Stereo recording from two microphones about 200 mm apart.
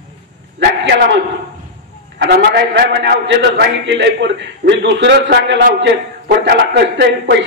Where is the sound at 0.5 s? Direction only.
60° right (ahead or behind).